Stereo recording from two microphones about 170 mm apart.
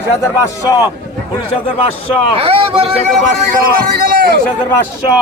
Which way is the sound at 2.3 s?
35° right (ahead or behind).